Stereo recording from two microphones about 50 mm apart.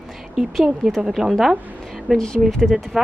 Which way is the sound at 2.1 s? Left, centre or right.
Centre.